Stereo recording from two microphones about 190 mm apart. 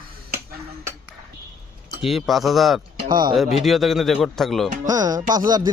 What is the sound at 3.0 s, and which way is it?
Speech, 25° right (ahead or behind).